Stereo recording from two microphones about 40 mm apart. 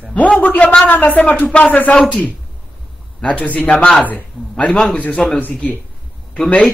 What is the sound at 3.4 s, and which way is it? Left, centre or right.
Speech, left.